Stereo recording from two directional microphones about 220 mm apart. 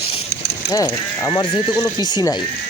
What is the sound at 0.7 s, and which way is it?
Speech, 15° left (ahead or behind).